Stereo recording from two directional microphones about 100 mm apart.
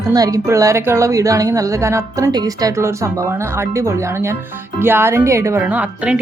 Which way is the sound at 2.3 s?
40° right (ahead or behind).